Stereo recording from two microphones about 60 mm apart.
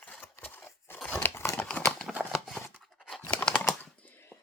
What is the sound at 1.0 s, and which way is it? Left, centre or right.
Crumpling, left.